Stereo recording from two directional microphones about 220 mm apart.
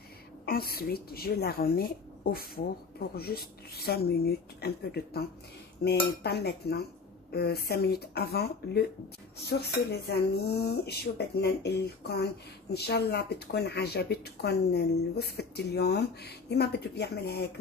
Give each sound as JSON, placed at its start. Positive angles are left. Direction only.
{"t": 0.5, "sound": "a woman's voice", "side_deg": 45}